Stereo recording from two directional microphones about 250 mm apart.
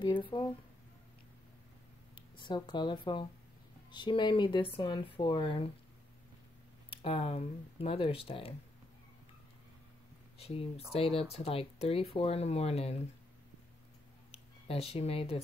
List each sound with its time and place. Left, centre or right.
0.0 s speech: centre
2.3 s speech: centre
6.9 s speech: left
10.4 s speech: left
14.3 s speech: left